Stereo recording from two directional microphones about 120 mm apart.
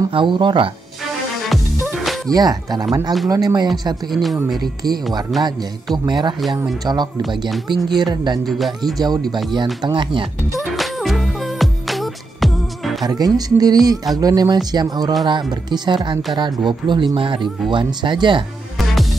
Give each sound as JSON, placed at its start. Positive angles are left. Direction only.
{"t": 0.1, "sound": "speech", "side_deg": -45}
{"t": 1.5, "sound": "music", "side_deg": 0}
{"t": 2.2, "sound": "speech", "side_deg": -35}
{"t": 4.1, "sound": "speech", "side_deg": 0}
{"t": 6.0, "sound": "speech", "side_deg": -40}
{"t": 8.5, "sound": "speech", "side_deg": 0}
{"t": 8.9, "sound": "speech", "side_deg": -35}
{"t": 10.5, "sound": "music", "side_deg": 0}
{"t": 13.0, "sound": "speech", "side_deg": -35}